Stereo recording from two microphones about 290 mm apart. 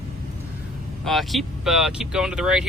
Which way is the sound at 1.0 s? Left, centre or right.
Centre.